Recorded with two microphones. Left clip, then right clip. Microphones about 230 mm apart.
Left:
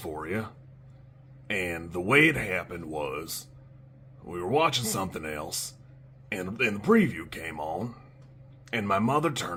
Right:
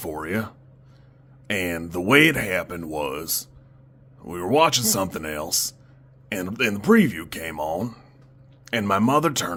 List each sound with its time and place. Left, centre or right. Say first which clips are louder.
0.0 s speech: right 5 dB; right